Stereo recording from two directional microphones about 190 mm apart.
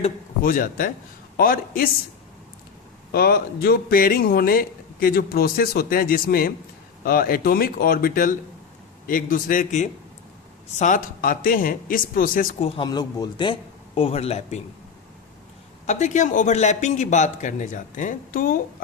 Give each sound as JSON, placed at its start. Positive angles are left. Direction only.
{"t": 0.4, "sound": "a man's voice", "side_deg": 45}
{"t": 3.1, "sound": "a man's voice", "side_deg": 55}
{"t": 12.6, "sound": "speech", "side_deg": 25}
{"t": 15.9, "sound": "speech", "side_deg": 40}